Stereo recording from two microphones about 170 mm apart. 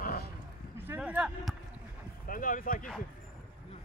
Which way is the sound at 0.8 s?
10° right (ahead or behind).